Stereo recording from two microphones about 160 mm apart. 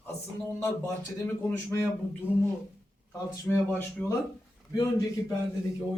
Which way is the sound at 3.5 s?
5° left (ahead or behind).